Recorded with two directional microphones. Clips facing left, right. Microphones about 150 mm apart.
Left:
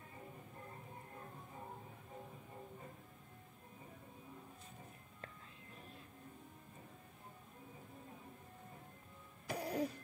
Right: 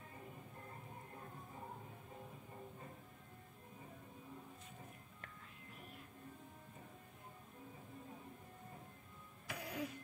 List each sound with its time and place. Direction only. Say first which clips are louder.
9.5 s music: left 6 dB; 35° left (ahead or behind)